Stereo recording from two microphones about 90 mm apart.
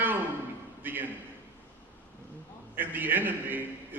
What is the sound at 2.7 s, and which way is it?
Speech, 20° right (ahead or behind).